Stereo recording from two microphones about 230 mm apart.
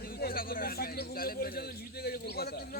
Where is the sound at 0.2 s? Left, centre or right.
Left.